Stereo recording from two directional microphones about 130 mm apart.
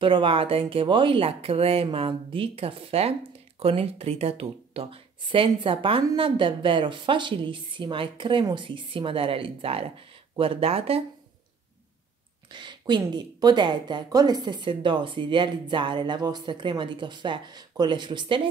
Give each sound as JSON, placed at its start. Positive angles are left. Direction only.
{"t": 0.0, "sound": "a woman's voice", "side_deg": -40}
{"t": 12.5, "sound": "a woman's voice", "side_deg": -35}